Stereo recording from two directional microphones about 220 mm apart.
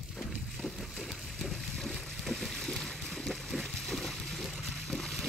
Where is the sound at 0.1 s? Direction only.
Centre (ahead or behind).